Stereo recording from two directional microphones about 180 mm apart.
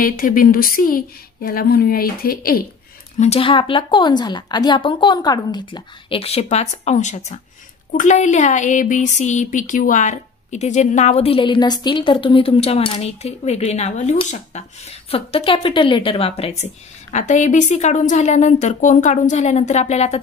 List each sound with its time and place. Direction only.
0.0 s speech: 50° left (ahead or behind)
3.2 s a woman's voice: 35° left (ahead or behind)